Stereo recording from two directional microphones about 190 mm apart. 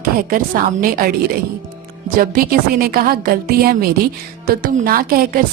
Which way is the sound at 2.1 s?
50° right (ahead or behind).